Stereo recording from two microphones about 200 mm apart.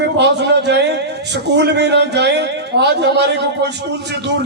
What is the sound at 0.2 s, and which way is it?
A man's voice, 55° right (ahead or behind).